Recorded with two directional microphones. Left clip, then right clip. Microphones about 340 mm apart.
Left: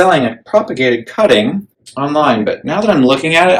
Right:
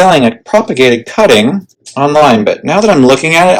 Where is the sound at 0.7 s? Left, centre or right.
Right.